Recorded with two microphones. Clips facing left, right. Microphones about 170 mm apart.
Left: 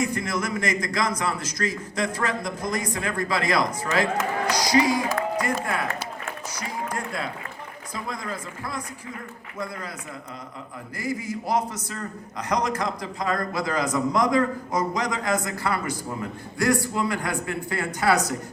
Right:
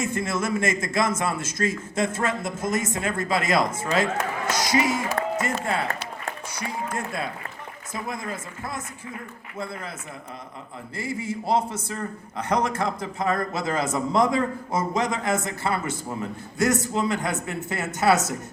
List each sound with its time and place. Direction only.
0.0 s a man's voice: 25° right (ahead or behind)
10.9 s a man's voice: 25° right (ahead or behind)